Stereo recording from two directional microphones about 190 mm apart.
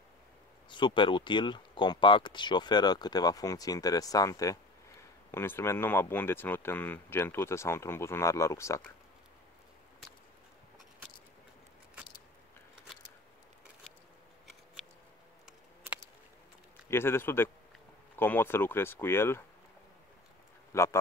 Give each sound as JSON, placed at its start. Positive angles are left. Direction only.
{"t": 0.7, "sound": "speech", "side_deg": 25}
{"t": 16.9, "sound": "speech", "side_deg": 15}
{"t": 20.7, "sound": "speech", "side_deg": 15}